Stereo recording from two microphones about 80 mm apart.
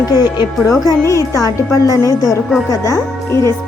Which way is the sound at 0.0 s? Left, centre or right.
Left.